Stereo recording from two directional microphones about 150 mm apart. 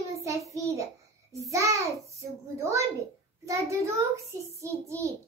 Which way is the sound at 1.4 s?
20° right (ahead or behind).